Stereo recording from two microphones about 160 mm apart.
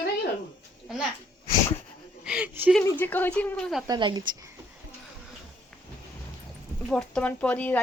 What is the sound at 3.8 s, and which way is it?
Speech, 25° right (ahead or behind).